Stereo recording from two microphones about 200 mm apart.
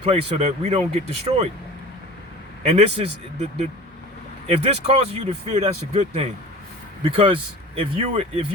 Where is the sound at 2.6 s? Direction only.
30° right (ahead or behind).